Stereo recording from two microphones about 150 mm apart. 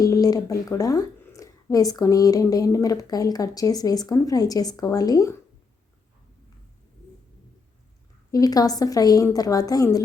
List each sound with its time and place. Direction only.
0.0 s a woman's voice: 25° left (ahead or behind)
8.3 s a woman's voice: 25° left (ahead or behind)